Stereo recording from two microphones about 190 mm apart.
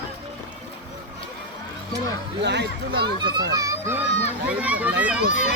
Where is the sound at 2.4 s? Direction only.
65° right (ahead or behind).